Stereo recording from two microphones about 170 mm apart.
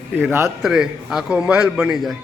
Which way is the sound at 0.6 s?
5° right (ahead or behind).